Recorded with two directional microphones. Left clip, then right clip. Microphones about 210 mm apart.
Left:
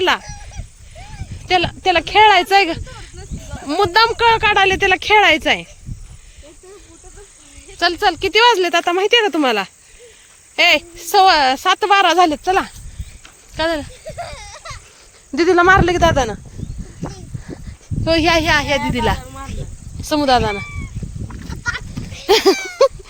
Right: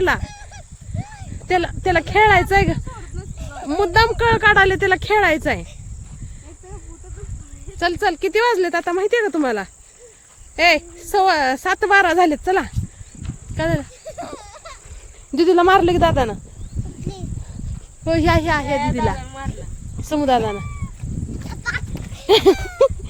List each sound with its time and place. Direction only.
1.5 s speech: 10° right (ahead or behind)
4.3 s speech: 20° right (ahead or behind)
7.8 s speech: 5° right (ahead or behind)
13.2 s insect: 10° right (ahead or behind)
14.1 s a sound: 40° left (ahead or behind)
15.4 s speech: 15° right (ahead or behind)
18.2 s speech: 5° right (ahead or behind)
20.0 s speech: 10° right (ahead or behind)
22.5 s a sound: 30° right (ahead or behind)